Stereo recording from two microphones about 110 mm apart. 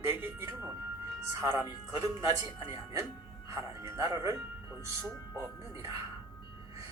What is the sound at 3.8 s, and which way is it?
Speech, 25° right (ahead or behind).